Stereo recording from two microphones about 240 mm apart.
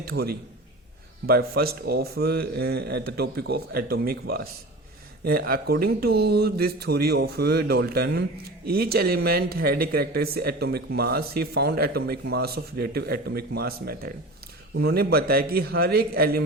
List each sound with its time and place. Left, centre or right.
0.0 s a man's voice: right